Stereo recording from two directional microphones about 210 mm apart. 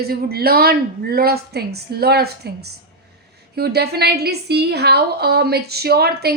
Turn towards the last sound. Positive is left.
turn(degrees=-50)  # may be behind; listen again after turning